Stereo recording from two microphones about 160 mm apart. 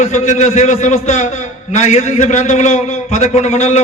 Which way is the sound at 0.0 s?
45° left (ahead or behind).